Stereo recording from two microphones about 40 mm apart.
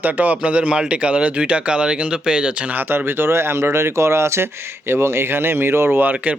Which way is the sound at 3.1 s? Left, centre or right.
Right.